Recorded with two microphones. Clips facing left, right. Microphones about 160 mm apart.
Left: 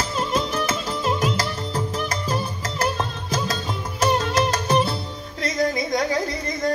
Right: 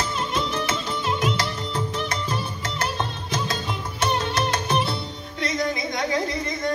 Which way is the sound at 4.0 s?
45° left (ahead or behind).